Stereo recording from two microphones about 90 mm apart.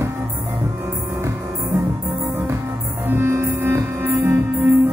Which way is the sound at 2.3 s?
25° right (ahead or behind).